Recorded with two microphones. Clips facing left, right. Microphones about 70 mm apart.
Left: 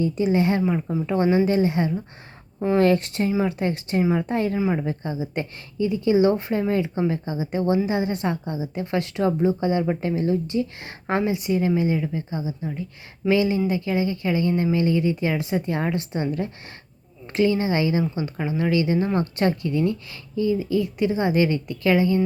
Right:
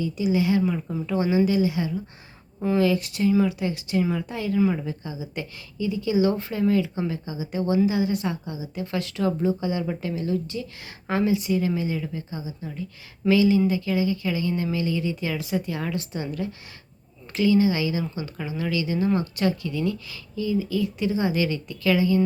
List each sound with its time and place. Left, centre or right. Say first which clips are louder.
0.0 s speech: left 3 dB; left
0.9 s speech: left 4 dB; left
1.1 s speech: left 2 dB; left
4.5 s speech: even; left